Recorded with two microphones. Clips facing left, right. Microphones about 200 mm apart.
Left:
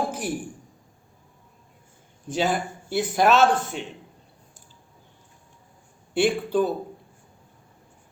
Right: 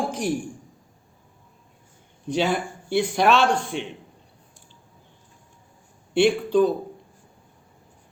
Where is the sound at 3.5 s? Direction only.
5° left (ahead or behind).